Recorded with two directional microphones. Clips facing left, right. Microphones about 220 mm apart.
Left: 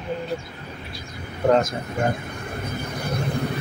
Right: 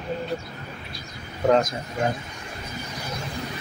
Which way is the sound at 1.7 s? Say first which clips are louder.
Left 2 dB; 60° left (ahead or behind).